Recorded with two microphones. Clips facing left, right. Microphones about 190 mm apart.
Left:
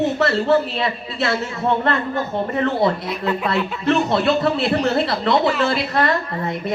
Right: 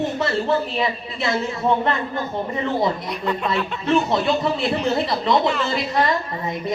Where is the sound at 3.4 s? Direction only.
65° left (ahead or behind).